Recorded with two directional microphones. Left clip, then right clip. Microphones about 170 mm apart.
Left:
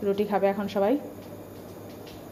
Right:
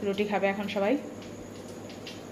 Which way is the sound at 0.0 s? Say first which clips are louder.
Left 3 dB; 15° left (ahead or behind).